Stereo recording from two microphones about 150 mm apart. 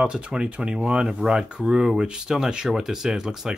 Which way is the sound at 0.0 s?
5° right (ahead or behind).